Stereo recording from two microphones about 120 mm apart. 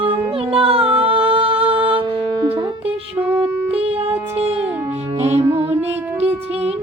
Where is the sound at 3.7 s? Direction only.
55° right (ahead or behind).